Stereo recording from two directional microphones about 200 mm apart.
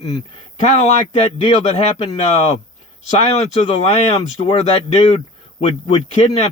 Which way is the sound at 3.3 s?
25° left (ahead or behind).